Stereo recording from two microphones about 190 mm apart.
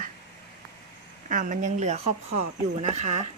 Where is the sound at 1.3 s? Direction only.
45° right (ahead or behind).